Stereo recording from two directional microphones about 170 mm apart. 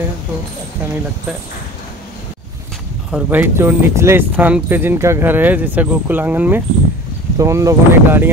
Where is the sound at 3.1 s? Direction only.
10° right (ahead or behind).